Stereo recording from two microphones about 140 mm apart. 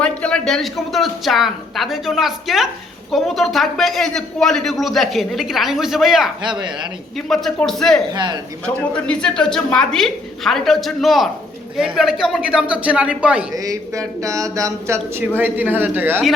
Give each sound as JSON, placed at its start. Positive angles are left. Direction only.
{"t": 0.0, "sound": "a man's voice", "side_deg": 5}
{"t": 6.4, "sound": "speech", "side_deg": -35}
{"t": 7.3, "sound": "a man's voice", "side_deg": 0}
{"t": 8.1, "sound": "speech", "side_deg": -30}
{"t": 8.6, "sound": "a man's voice", "side_deg": 5}
{"t": 13.5, "sound": "mantra", "side_deg": -25}
{"t": 15.4, "sound": "speech", "side_deg": -15}